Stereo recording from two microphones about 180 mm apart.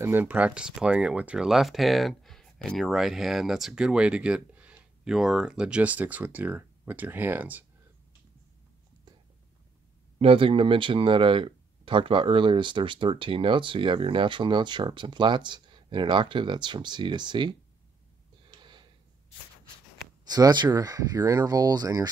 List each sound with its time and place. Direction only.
0.0 s speech: 10° right (ahead or behind)
10.1 s speech: 30° right (ahead or behind)
18.4 s a sound: 25° right (ahead or behind)
20.2 s speech: 20° right (ahead or behind)